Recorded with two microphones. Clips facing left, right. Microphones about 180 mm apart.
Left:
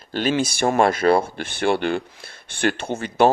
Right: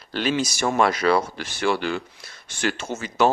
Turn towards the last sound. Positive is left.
turn(degrees=60)  # may be behind; listen again after turning